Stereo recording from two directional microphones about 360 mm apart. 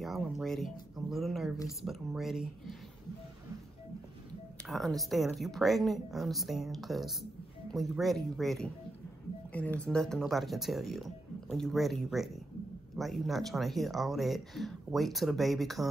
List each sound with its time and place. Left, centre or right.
0.0 s speech: centre
4.6 s speech: centre